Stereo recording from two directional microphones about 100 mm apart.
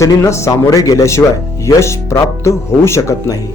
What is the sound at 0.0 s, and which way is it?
Speech, 30° left (ahead or behind).